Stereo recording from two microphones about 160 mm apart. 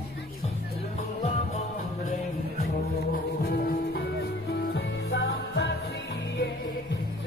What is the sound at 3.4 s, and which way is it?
Music, 70° left (ahead or behind).